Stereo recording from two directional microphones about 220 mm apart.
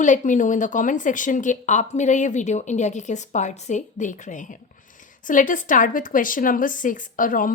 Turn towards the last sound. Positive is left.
turn(degrees=40)  # may be behind; listen again after turning